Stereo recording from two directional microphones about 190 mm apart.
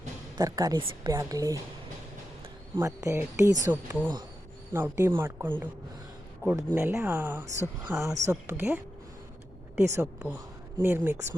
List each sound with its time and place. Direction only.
0.3 s a woman's voice: 20° right (ahead or behind)
2.7 s speech: 15° right (ahead or behind)
9.8 s speech: 10° right (ahead or behind)